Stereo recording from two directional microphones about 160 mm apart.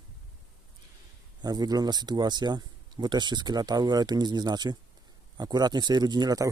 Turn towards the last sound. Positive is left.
turn(degrees=-25)  # may be behind; listen again after turning